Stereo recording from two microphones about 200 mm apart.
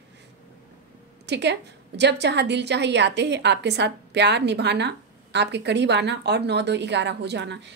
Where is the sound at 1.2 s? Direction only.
60° right (ahead or behind).